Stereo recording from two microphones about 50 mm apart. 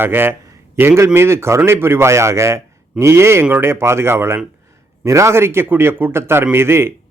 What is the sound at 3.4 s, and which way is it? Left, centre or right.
Speech, right.